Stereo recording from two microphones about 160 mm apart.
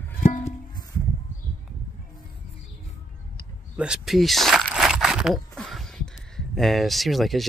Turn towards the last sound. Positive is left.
turn(degrees=0)  # may be behind; listen again after turning